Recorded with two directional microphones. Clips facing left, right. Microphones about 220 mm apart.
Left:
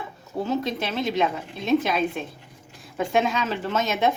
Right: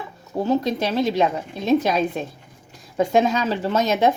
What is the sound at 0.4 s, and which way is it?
Speech, 40° right (ahead or behind).